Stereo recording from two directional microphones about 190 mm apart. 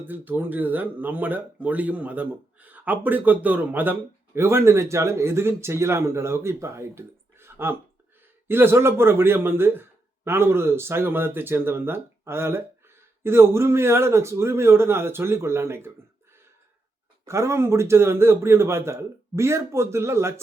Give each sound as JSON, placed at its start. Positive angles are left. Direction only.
{"t": 0.0, "sound": "speech", "side_deg": -10}
{"t": 17.2, "sound": "speech", "side_deg": -15}